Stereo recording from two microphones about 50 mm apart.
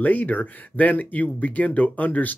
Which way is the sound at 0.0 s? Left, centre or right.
Left.